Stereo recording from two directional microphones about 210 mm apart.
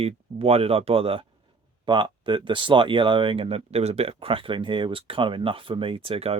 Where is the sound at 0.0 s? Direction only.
30° right (ahead or behind).